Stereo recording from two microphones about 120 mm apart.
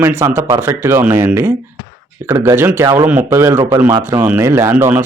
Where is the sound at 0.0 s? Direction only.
20° right (ahead or behind).